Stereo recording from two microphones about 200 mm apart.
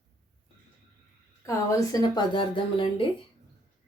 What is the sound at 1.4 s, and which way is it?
A woman's voice, 20° left (ahead or behind).